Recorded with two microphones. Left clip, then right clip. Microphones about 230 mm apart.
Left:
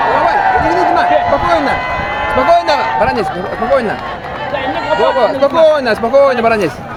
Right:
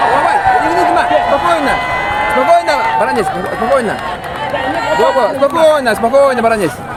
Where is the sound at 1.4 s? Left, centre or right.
Centre.